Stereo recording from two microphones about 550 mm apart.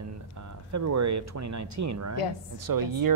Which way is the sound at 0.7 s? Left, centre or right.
Right.